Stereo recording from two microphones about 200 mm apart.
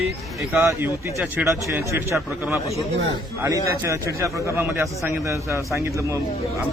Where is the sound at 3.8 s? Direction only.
15° right (ahead or behind).